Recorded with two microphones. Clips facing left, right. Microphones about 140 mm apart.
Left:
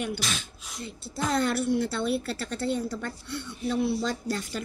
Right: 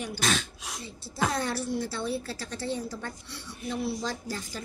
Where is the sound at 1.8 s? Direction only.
65° left (ahead or behind).